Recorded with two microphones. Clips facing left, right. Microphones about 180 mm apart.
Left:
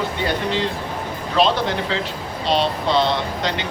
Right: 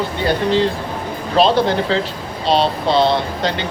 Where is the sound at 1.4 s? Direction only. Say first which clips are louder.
Right 5 dB; 35° right (ahead or behind).